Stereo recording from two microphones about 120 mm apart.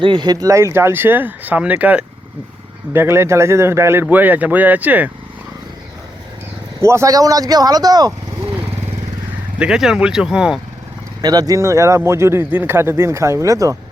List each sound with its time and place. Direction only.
0.0 s a man's voice: 40° right (ahead or behind); by 5.1 s 15° right (ahead or behind)
6.8 s speech: 25° right (ahead or behind)
9.6 s speech: 5° right (ahead or behind)
11.2 s a man's voice: 35° right (ahead or behind)